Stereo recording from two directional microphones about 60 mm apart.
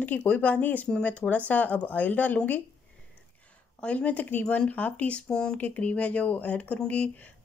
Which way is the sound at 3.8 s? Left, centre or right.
Left.